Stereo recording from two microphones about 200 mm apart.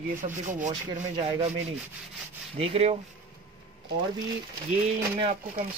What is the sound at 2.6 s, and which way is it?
Speech, 30° right (ahead or behind).